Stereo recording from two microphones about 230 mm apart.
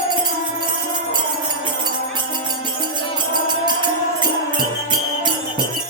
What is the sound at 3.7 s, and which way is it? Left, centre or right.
Music, centre.